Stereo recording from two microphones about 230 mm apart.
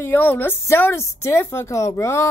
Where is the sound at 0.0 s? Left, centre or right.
Centre.